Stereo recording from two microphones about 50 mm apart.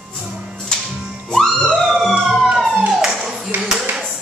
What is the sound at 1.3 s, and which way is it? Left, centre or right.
Police car, centre.